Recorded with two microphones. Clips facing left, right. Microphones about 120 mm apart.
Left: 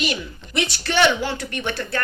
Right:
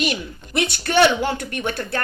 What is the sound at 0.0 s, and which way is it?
Speech, 50° right (ahead or behind).